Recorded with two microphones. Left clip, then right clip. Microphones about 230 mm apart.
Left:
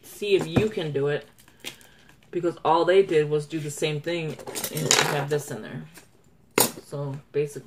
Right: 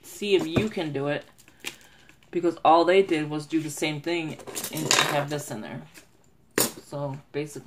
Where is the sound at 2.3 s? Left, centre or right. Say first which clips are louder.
Right 3 dB; right.